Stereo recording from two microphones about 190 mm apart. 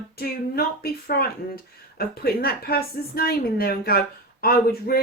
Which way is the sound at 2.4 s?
55° left (ahead or behind).